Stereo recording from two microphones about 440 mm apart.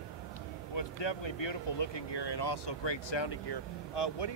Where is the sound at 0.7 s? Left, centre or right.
Left.